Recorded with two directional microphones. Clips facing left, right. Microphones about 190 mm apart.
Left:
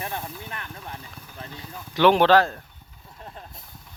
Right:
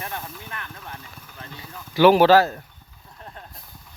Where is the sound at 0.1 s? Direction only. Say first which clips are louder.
Left 1 dB; 25° left (ahead or behind).